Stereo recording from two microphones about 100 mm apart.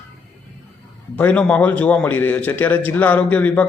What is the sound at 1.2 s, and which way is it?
A man's voice, 15° left (ahead or behind).